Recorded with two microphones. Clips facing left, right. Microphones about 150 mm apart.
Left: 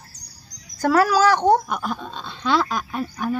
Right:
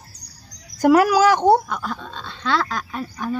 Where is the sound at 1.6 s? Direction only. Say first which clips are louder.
Left 1 dB; 15° left (ahead or behind).